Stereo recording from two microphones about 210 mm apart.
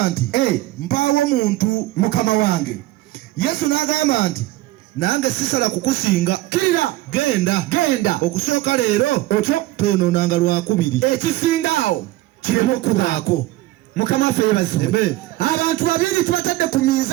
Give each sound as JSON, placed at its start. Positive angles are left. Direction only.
{"t": 0.0, "sound": "speech", "side_deg": 45}